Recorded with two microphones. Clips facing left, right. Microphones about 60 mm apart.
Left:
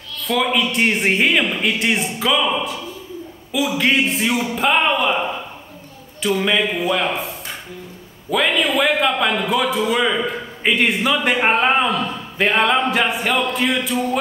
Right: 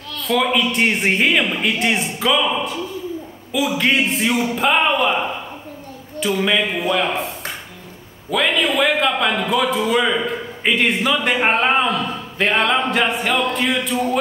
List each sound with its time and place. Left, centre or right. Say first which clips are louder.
0.3 s a man's voice: right 1 dB; centre